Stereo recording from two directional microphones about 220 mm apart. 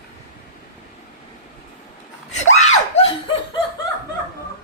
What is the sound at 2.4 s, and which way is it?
Screaming, 30° left (ahead or behind).